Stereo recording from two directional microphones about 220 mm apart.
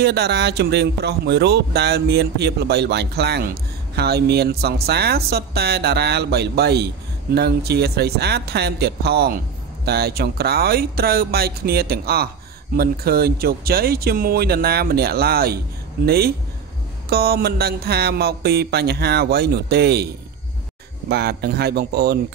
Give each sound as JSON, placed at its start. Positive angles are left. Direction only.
{"t": 0.0, "sound": "speech", "side_deg": -50}
{"t": 21.1, "sound": "speech", "side_deg": -45}